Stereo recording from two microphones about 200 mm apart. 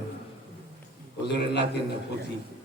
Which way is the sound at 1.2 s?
55° left (ahead or behind).